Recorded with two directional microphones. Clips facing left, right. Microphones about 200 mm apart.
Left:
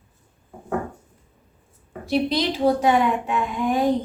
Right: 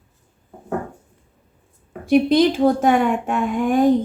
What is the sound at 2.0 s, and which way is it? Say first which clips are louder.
A child's voice: right 7 dB; 50° right (ahead or behind).